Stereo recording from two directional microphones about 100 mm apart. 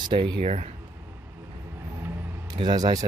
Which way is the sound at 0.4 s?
90° right.